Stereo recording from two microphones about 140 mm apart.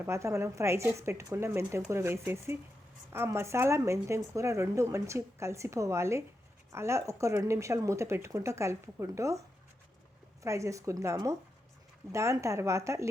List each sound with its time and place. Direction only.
0.0 s speech: 20° right (ahead or behind)
10.4 s speech: 20° right (ahead or behind)